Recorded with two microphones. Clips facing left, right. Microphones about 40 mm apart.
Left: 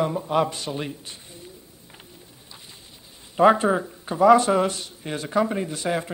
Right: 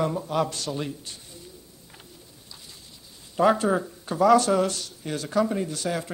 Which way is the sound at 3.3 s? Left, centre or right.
Left.